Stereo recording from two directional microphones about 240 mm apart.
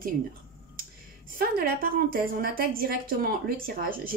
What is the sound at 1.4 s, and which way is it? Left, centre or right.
A woman's voice, right.